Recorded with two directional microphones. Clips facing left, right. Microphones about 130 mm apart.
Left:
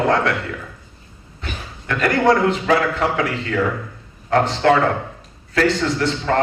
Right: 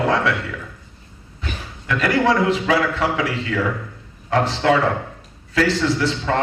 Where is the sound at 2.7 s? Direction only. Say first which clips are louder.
Left 1 dB; 50° left (ahead or behind).